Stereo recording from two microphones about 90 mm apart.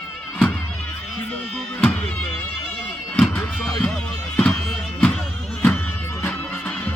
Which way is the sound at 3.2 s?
5° left (ahead or behind).